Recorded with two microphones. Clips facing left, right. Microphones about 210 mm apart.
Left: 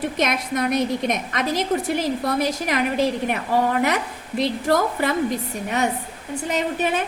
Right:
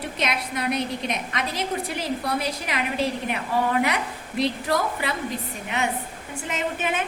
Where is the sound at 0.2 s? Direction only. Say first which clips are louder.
Left 4 dB; 45° left (ahead or behind).